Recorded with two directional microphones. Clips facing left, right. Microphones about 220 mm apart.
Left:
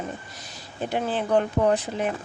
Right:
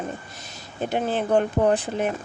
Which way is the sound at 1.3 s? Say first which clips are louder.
Right 1 dB; 30° right (ahead or behind).